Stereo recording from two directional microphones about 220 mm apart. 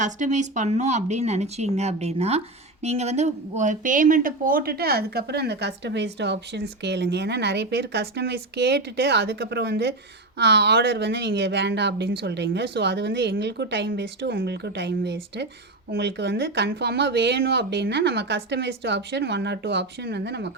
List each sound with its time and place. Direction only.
0.0 s speech: 35° right (ahead or behind); by 20.5 s 50° right (ahead or behind)